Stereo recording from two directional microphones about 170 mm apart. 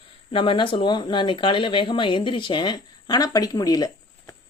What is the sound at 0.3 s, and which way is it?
Speech, 30° left (ahead or behind).